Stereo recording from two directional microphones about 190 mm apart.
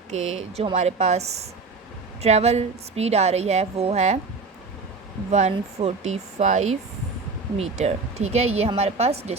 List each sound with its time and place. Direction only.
0.2 s speech: 90° right
0.5 s a woman's voice: 35° right (ahead or behind)
5.3 s a woman's voice: 35° right (ahead or behind)